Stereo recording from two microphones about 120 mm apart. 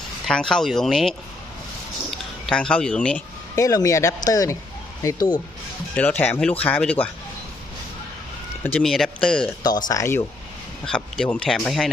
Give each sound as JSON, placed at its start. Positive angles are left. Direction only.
{"t": 0.3, "sound": "speech", "side_deg": 5}
{"t": 3.5, "sound": "speech", "side_deg": 30}
{"t": 5.9, "sound": "speech", "side_deg": 10}
{"t": 8.8, "sound": "speech", "side_deg": 0}
{"t": 9.6, "sound": "speech", "side_deg": 35}
{"t": 10.8, "sound": "speech", "side_deg": 5}